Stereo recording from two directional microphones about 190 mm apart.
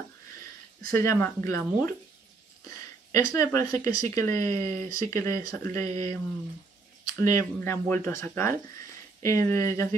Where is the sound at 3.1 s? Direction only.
15° left (ahead or behind).